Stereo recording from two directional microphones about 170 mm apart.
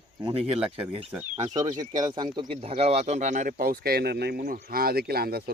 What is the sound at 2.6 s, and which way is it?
Speech, 35° right (ahead or behind).